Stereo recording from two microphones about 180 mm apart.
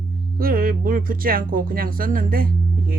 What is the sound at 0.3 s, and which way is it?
Speech, 55° right (ahead or behind).